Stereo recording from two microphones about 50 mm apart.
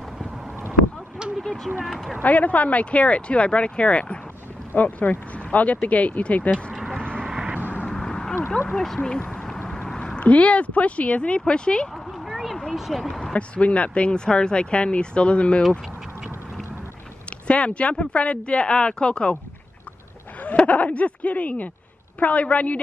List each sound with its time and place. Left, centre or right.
1.4 s speech: centre
2.2 s speech: left
6.5 s vehicle: centre
6.9 s vehicle: centre
7.2 s vehicle: right
7.9 s a sound: centre
8.5 s speech: centre
9.2 s a sound: centre
10.1 s speech: left
12.1 s a sound: centre
12.7 s speech: centre
13.2 s speech: left
17.5 s speech: left
20.4 s speech: left